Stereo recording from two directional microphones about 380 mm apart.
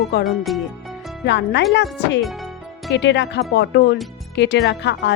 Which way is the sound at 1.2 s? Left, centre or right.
Left.